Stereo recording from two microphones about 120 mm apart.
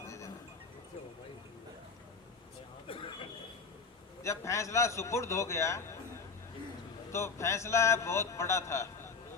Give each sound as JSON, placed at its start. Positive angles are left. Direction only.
{"t": 0.0, "sound": "music", "side_deg": 25}
{"t": 2.8, "sound": "a sound", "side_deg": 45}
{"t": 4.2, "sound": "a man's voice", "side_deg": 25}
{"t": 7.1, "sound": "a man's voice", "side_deg": 25}